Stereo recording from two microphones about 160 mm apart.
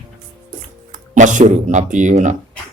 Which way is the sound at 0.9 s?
50° right (ahead or behind).